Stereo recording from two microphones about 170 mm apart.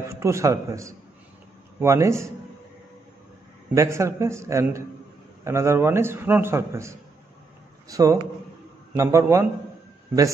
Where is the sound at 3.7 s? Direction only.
15° right (ahead or behind).